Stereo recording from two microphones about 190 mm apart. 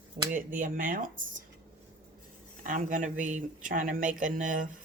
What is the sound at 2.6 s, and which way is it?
Speech, 45° right (ahead or behind).